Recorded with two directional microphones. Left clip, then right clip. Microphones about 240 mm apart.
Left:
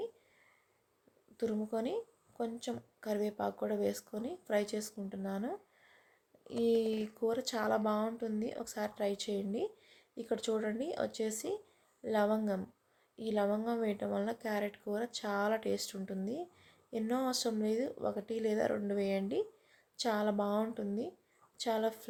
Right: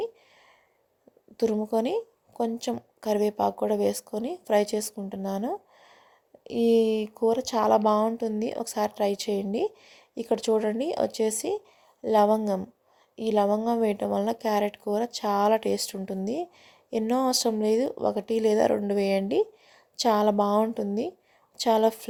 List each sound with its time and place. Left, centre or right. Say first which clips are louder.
1.4 s speech: right 11 dB; right